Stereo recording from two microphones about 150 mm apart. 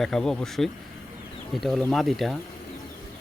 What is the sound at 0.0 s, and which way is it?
Speech, 5° left (ahead or behind).